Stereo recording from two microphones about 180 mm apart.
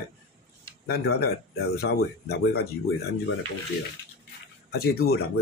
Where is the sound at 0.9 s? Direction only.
60° left (ahead or behind).